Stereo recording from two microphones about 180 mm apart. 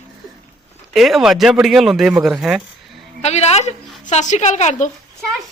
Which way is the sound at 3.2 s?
35° left (ahead or behind).